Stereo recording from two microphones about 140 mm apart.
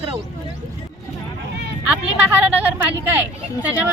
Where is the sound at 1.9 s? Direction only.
10° right (ahead or behind).